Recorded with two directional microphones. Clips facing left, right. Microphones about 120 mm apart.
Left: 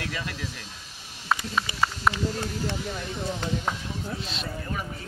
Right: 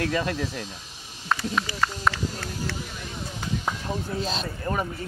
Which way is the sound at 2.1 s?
5° left (ahead or behind).